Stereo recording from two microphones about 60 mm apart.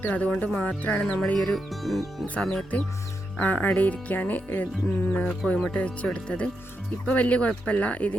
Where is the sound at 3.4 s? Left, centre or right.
Left.